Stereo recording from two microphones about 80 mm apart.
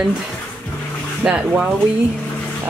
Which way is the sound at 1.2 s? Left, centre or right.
Centre.